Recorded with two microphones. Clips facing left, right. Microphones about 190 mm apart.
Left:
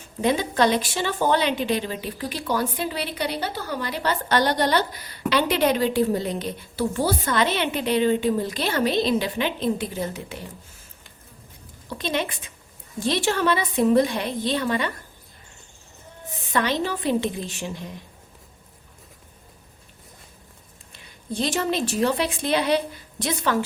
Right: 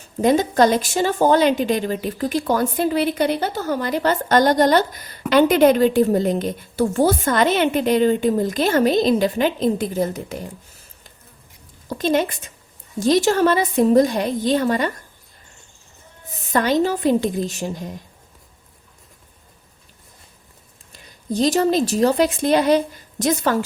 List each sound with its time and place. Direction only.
0.2 s a woman's voice: 45° right (ahead or behind)
11.9 s a woman's voice: 45° right (ahead or behind)
16.5 s a woman's voice: 45° right (ahead or behind)
20.9 s a woman's voice: 40° right (ahead or behind)